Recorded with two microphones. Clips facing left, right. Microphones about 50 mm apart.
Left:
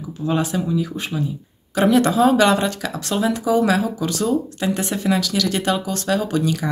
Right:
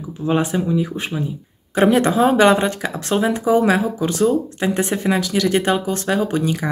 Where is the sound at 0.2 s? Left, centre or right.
Right.